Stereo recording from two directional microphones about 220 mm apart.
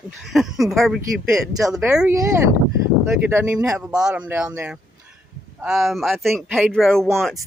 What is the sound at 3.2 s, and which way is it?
Speech, 10° right (ahead or behind).